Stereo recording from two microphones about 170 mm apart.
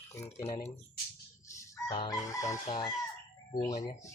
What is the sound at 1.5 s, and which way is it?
Chicken, 20° left (ahead or behind).